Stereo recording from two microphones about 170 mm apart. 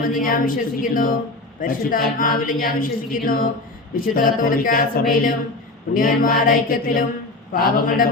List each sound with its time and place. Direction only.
0.0 s speech: 55° left (ahead or behind)